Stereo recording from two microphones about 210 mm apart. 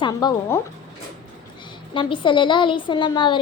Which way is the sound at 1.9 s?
25° left (ahead or behind).